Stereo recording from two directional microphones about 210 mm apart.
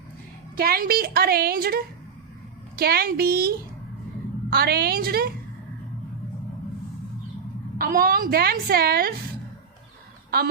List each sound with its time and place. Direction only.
0.5 s a woman's voice: 45° right (ahead or behind)
7.8 s a woman's voice: 45° right (ahead or behind)